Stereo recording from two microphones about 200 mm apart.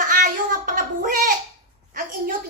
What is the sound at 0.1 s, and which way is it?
Child singing, 40° right (ahead or behind).